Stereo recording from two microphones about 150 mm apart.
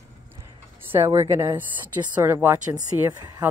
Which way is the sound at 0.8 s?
15° right (ahead or behind).